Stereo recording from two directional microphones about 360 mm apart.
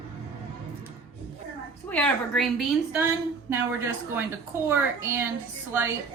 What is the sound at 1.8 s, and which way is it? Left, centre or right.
A woman's voice, centre.